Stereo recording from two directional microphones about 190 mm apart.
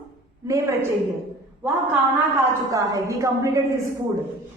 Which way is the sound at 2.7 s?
15° right (ahead or behind).